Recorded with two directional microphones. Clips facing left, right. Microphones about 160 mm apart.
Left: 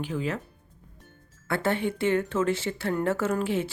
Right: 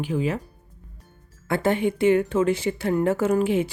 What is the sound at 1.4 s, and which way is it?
Speech, 15° right (ahead or behind).